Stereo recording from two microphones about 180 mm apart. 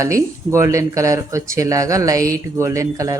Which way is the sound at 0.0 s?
15° right (ahead or behind).